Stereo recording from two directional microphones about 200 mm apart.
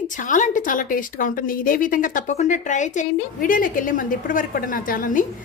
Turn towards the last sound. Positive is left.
turn(degrees=45)  # may be behind; listen again after turning